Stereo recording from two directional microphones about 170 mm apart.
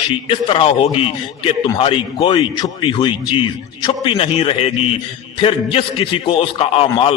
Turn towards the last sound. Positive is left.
turn(degrees=35)  # may be behind; listen again after turning